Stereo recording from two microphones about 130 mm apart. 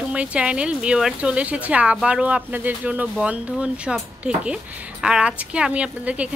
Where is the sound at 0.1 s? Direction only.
10° right (ahead or behind).